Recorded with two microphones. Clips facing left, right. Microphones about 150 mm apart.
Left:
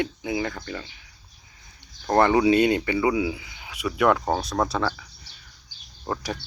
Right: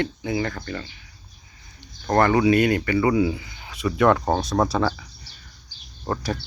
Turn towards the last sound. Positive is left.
turn(degrees=10)  # may be behind; listen again after turning